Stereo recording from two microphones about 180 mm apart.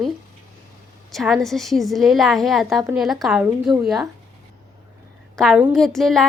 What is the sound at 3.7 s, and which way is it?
Speech, 20° right (ahead or behind).